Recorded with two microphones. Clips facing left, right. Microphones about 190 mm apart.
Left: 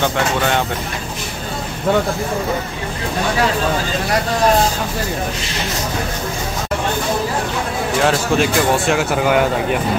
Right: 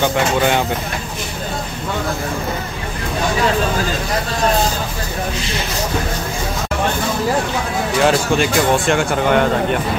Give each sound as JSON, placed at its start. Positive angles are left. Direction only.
{"t": 8.0, "sound": "speech", "side_deg": 0}